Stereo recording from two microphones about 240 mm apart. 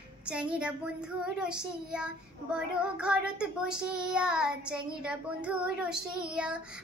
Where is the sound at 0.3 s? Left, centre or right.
Centre.